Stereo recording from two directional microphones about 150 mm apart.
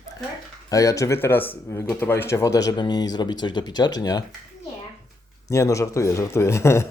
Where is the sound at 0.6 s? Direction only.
20° left (ahead or behind).